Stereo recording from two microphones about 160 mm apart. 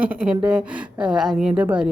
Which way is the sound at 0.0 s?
5° right (ahead or behind).